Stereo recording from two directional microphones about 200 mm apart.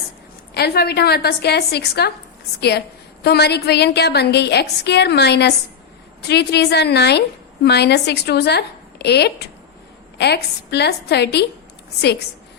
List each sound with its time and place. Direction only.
0.5 s a woman's voice: 55° left (ahead or behind)